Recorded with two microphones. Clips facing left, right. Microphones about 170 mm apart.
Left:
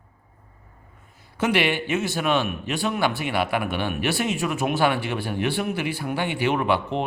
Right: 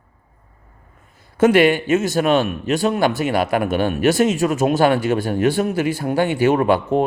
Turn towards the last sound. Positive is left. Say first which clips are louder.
# right 7 dB
turn(degrees=-45)  # may be behind; listen again after turning